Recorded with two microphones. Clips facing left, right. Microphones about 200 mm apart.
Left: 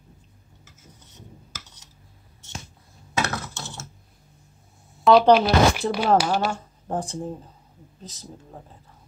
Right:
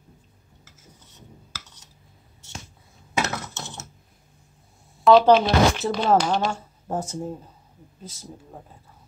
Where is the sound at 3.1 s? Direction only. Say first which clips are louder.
Even; 20° right (ahead or behind).